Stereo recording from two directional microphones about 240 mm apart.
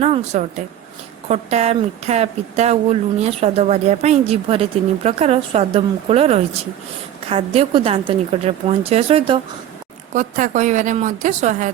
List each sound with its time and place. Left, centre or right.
0.0 s speech: right
10.2 s speech: right